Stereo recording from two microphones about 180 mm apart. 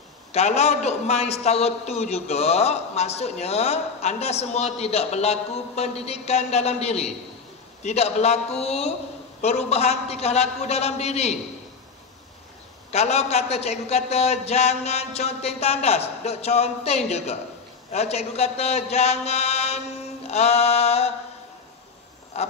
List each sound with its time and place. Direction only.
0.3 s a man's voice: 35° left (ahead or behind)
12.9 s a man's voice: 35° left (ahead or behind)
22.3 s frog: 35° left (ahead or behind)